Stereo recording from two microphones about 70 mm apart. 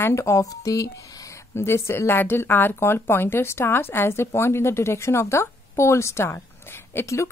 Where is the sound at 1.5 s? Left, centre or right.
Left.